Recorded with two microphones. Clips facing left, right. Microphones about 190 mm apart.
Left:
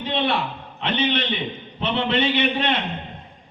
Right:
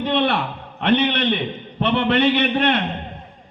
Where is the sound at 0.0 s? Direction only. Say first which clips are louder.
Right 4 dB; 60° right (ahead or behind).